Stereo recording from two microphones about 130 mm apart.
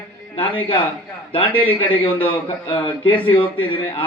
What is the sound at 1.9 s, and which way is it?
A man's voice, 45° left (ahead or behind).